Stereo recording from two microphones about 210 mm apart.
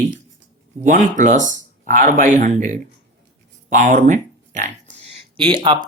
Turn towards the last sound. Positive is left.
turn(degrees=-20)  # may be behind; listen again after turning